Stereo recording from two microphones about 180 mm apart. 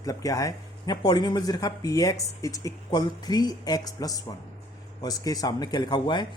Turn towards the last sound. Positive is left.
turn(degrees=25)  # may be behind; listen again after turning